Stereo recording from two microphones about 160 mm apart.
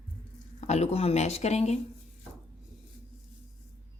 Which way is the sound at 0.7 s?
40° left (ahead or behind).